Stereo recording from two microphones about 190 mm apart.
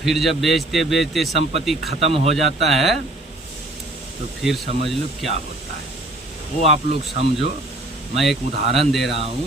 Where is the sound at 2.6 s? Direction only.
Centre (ahead or behind).